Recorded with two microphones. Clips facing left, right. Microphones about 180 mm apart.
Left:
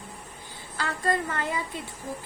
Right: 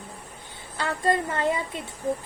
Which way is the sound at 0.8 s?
25° right (ahead or behind).